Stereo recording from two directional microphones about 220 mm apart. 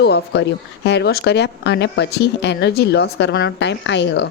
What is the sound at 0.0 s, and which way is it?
Speech, 50° left (ahead or behind).